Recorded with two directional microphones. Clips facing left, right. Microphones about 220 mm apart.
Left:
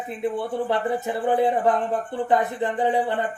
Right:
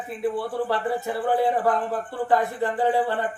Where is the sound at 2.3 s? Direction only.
20° left (ahead or behind).